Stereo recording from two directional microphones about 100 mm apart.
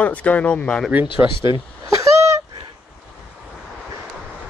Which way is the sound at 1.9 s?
30° right (ahead or behind).